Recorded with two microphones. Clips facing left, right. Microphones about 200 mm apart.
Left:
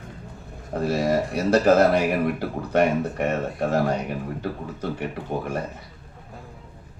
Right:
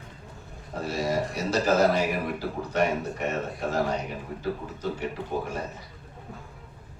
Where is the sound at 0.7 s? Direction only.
60° left (ahead or behind).